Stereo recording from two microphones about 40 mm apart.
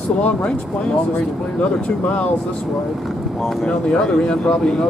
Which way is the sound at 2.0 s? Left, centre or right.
Left.